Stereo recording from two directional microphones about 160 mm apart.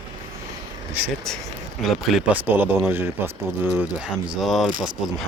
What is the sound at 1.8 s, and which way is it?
Speech, centre (ahead or behind).